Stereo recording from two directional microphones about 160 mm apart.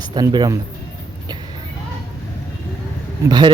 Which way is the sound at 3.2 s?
25° right (ahead or behind).